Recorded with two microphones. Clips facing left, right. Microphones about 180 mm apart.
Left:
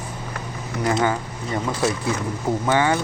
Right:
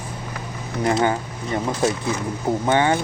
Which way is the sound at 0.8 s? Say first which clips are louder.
Right 1 dB; 25° right (ahead or behind).